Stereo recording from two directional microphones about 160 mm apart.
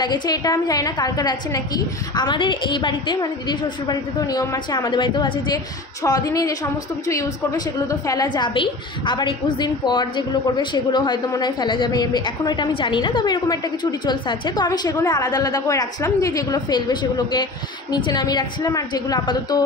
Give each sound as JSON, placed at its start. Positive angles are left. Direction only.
{"t": 0.0, "sound": "a woman's voice", "side_deg": 25}